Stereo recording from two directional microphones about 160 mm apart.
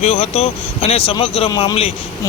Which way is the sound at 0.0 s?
40° left (ahead or behind).